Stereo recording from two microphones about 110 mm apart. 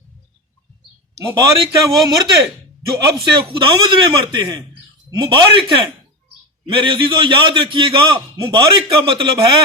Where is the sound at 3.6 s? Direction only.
50° right (ahead or behind).